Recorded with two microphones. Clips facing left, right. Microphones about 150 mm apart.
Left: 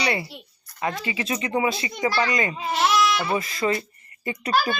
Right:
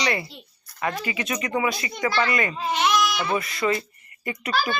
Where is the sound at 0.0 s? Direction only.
30° left (ahead or behind).